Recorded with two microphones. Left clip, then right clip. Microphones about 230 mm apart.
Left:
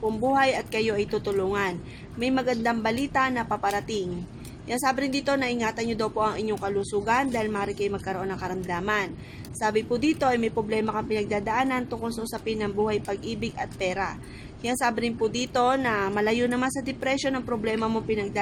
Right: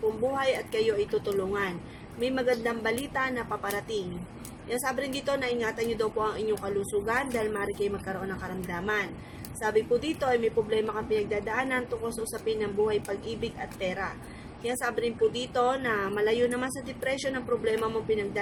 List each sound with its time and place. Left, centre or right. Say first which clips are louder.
0.3 s a woman's voice: left 4 dB; left
2.2 s a woman's voice: left 2 dB; left